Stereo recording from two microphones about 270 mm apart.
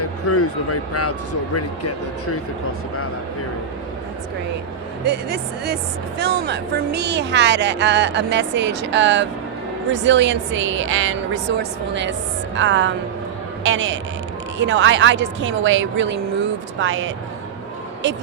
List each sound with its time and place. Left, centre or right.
0.0 s speech: left
5.0 s a woman's voice: right